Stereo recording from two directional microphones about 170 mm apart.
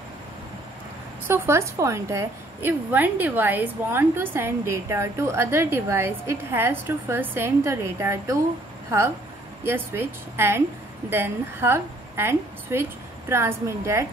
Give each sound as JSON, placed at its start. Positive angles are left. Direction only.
{"t": 1.2, "sound": "a woman's voice", "side_deg": -15}
{"t": 9.7, "sound": "a woman's voice", "side_deg": -15}